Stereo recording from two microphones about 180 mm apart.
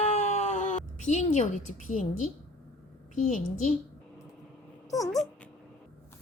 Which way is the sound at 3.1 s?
45° left (ahead or behind).